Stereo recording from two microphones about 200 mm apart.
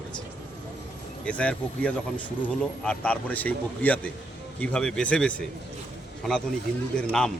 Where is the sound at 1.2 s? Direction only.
5° left (ahead or behind).